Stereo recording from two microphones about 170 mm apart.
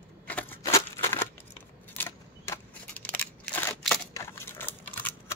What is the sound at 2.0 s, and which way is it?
Scissors, 10° left (ahead or behind).